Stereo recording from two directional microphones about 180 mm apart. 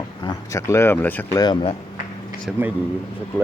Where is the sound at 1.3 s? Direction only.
25° left (ahead or behind).